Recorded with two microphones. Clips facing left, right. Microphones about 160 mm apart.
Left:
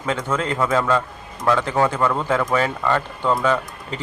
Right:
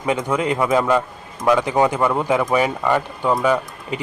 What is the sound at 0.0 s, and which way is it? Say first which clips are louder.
Speech: right 3 dB; 15° right (ahead or behind).